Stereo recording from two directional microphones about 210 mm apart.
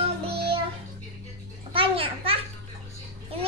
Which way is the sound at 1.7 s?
25° right (ahead or behind).